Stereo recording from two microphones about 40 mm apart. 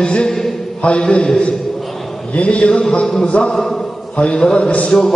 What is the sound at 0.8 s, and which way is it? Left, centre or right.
Speech, left.